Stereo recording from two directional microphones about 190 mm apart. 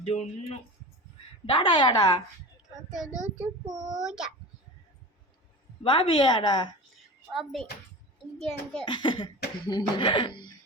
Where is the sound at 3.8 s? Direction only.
Centre (ahead or behind).